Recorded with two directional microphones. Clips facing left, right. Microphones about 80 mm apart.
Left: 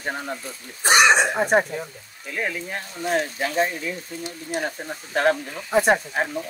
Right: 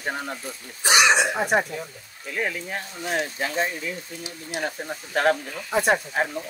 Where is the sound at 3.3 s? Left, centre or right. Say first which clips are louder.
Left 3 dB; centre.